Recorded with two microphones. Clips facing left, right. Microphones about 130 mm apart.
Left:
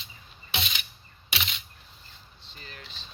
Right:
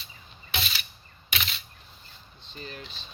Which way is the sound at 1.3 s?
20° left (ahead or behind).